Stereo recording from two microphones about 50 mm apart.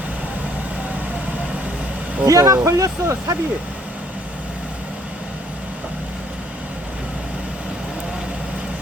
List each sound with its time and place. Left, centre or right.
2.2 s speech: right